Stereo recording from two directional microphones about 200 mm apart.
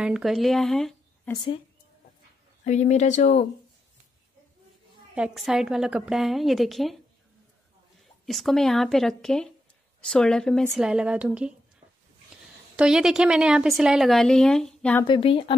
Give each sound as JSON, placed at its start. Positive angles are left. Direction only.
{"t": 0.0, "sound": "speech", "side_deg": -5}
{"t": 1.3, "sound": "speech", "side_deg": 25}
{"t": 2.6, "sound": "speech", "side_deg": 35}
{"t": 5.1, "sound": "a woman's voice", "side_deg": -5}
{"t": 8.3, "sound": "a woman's voice", "side_deg": 0}
{"t": 12.7, "sound": "a woman's voice", "side_deg": -5}
{"t": 15.0, "sound": "speech", "side_deg": 25}